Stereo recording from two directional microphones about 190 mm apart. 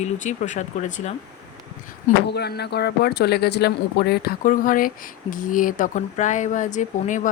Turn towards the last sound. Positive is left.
turn(degrees=40)  # may be behind; listen again after turning